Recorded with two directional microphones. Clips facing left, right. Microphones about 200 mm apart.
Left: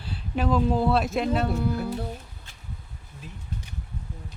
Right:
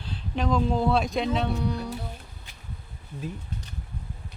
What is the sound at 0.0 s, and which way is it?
Speech, 5° left (ahead or behind).